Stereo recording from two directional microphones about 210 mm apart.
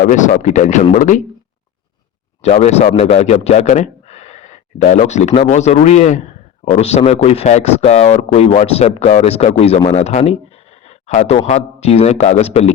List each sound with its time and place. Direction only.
0.0 s a man's voice: 35° left (ahead or behind)
2.4 s a man's voice: 30° left (ahead or behind)
10.8 s a sound: 35° left (ahead or behind)
11.4 s a man's voice: 30° left (ahead or behind)